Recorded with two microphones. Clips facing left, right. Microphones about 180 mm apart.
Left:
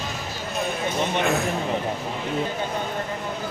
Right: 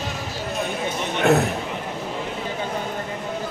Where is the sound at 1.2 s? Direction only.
65° right (ahead or behind).